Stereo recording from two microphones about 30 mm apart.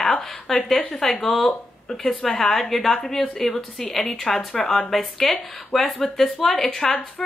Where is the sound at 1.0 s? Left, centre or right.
Centre.